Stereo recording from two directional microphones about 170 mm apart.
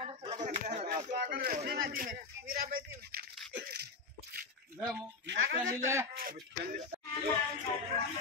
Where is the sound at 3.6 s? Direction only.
70° right (ahead or behind).